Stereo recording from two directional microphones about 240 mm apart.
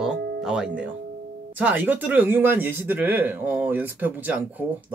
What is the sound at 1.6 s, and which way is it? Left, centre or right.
Speech, centre.